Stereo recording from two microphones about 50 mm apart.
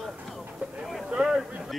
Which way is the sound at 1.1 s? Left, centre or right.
Centre.